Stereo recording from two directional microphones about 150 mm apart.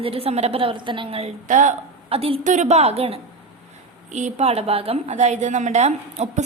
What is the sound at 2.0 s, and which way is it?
Speech, 40° right (ahead or behind).